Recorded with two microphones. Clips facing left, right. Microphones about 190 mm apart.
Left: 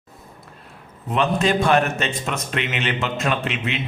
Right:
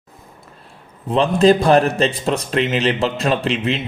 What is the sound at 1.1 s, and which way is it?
A man's voice, 35° right (ahead or behind).